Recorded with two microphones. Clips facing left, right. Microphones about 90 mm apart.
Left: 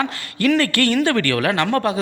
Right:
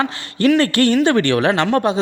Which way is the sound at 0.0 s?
30° right (ahead or behind).